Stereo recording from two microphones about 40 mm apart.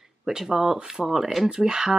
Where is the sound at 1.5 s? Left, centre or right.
Centre.